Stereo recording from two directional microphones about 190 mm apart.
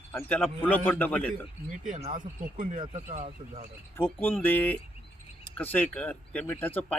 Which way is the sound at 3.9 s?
10° left (ahead or behind).